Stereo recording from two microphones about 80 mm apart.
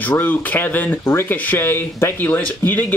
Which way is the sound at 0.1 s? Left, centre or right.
Left.